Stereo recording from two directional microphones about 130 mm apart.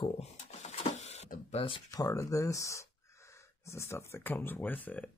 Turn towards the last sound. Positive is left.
turn(degrees=15)  # may be behind; listen again after turning